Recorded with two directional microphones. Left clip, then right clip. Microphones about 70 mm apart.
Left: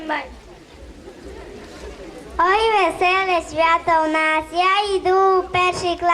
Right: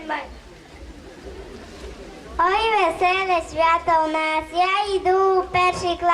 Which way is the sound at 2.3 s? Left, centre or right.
Left.